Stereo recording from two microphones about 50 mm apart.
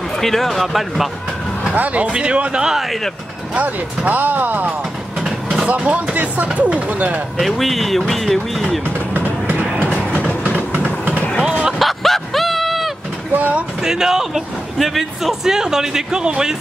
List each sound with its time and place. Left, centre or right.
0.2 s speech: centre
1.8 s speech: right
3.5 s speech: right
5.2 s vehicle: centre
5.7 s speech: right
7.3 s speech: centre
9.1 s vehicle: right
11.4 s a sound: centre
11.8 s a sound: centre
13.3 s speech: right
13.8 s a man's voice: centre